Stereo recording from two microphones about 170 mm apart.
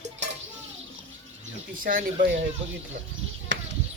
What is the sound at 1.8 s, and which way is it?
Speech, 55° right (ahead or behind).